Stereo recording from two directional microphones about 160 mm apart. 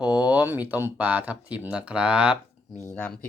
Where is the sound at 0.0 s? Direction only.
5° right (ahead or behind).